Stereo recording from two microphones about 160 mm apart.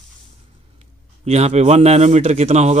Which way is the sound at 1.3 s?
40° right (ahead or behind).